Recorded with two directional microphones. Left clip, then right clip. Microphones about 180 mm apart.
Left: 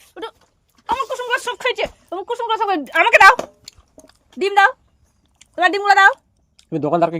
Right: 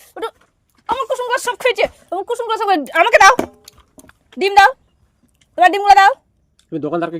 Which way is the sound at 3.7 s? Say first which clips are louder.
Left 2 dB; 35° left (ahead or behind).